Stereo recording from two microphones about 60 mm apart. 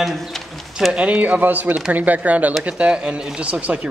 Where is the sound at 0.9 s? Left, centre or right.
Right.